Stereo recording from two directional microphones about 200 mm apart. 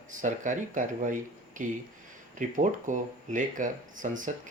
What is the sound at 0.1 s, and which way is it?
Speech, 40° right (ahead or behind).